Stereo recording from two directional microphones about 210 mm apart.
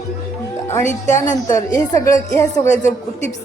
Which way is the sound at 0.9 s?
35° left (ahead or behind).